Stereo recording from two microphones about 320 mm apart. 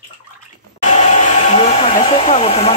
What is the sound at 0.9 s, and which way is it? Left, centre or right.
Hair dryer, left.